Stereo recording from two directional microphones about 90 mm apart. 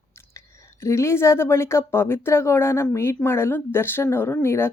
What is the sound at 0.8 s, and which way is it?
Speech, 35° left (ahead or behind).